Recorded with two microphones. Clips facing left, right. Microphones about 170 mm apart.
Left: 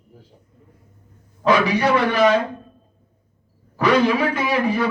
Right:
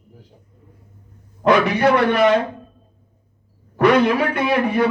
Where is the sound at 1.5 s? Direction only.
60° right (ahead or behind).